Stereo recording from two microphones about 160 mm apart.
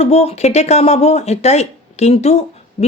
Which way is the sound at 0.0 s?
40° left (ahead or behind).